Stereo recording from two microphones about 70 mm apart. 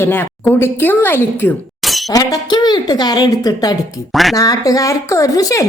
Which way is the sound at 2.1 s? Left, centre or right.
Left.